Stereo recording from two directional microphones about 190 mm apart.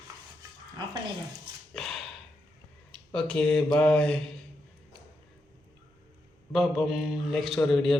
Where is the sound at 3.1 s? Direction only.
5° left (ahead or behind).